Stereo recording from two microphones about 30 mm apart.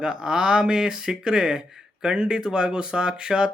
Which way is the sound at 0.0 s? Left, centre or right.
Right.